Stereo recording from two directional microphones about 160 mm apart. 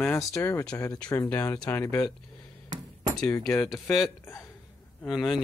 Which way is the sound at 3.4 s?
Centre (ahead or behind).